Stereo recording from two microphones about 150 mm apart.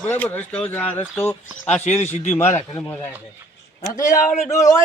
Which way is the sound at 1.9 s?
50° left (ahead or behind).